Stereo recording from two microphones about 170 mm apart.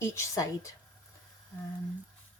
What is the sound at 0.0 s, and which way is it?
Speech, 15° left (ahead or behind).